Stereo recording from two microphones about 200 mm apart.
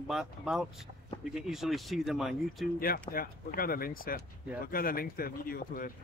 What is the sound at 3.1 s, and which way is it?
Speech, 45° left (ahead or behind).